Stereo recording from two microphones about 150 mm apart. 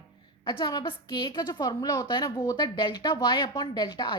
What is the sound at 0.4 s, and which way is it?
A woman's voice, 30° left (ahead or behind).